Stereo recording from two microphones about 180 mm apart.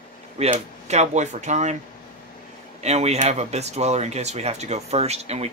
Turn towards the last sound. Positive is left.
turn(degrees=-35)  # may be behind; listen again after turning